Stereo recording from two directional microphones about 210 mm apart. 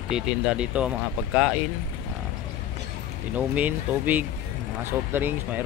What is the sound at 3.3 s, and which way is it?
Speech, 10° right (ahead or behind).